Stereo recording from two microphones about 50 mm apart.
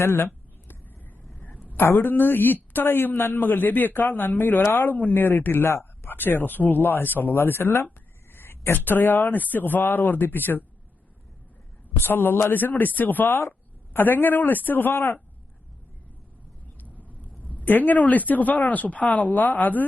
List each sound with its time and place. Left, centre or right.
0.0 s speech: left
1.3 s a sound: left
1.8 s a man's voice: left
8.3 s a sound: left
8.8 s a man's voice: left
11.9 s a man's voice: left
13.2 s speech: left
13.9 s a man's voice: left
16.8 s vehicle: right
17.2 s a sound: left
17.6 s a man's voice: left